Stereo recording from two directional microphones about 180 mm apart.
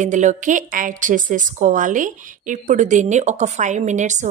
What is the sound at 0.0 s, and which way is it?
A woman's voice, 45° right (ahead or behind).